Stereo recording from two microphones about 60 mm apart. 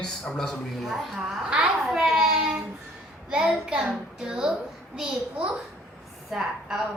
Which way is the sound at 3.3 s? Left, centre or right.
Centre.